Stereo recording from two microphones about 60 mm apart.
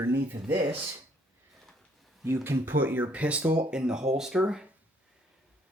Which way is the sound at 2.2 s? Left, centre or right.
Right.